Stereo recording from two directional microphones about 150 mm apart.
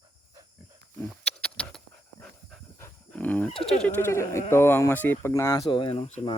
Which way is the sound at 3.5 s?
40° left (ahead or behind).